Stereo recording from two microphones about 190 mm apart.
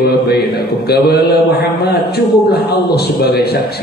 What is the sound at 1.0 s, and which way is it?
A man's voice, 60° left (ahead or behind).